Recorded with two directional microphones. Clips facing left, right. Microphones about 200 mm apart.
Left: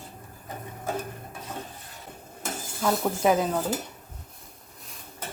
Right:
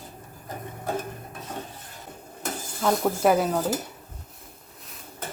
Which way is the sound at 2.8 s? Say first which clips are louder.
Right 2 dB; centre (ahead or behind).